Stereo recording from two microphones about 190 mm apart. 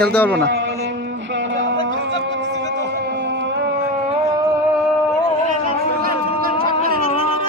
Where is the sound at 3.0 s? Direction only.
60° right (ahead or behind).